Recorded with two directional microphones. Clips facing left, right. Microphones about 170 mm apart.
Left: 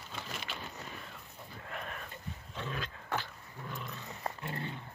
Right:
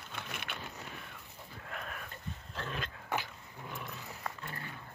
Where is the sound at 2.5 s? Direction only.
Centre (ahead or behind).